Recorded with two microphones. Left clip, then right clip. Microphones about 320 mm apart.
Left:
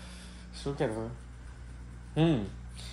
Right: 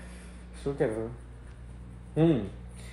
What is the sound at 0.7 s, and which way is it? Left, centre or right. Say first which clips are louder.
Speech: right 4 dB; left.